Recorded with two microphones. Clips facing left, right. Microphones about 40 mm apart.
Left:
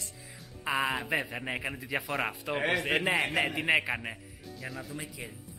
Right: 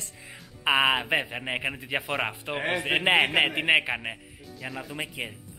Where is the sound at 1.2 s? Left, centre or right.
Right.